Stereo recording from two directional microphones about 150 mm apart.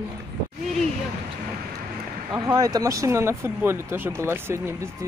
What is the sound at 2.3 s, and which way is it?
Speech, 25° right (ahead or behind).